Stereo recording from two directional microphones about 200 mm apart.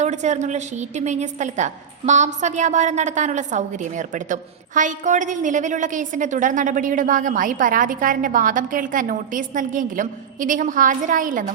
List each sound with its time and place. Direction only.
0.0 s a woman's voice: 35° right (ahead or behind)